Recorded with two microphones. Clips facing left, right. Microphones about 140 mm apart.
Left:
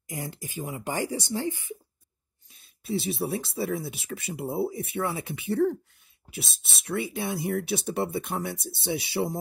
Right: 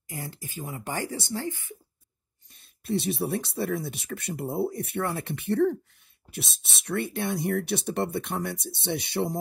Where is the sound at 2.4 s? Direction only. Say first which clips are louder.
Right 2 dB; centre (ahead or behind).